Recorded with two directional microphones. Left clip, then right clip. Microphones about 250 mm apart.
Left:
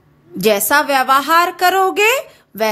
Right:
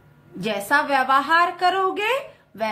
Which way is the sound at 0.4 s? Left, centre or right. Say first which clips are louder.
Left 8 dB; left.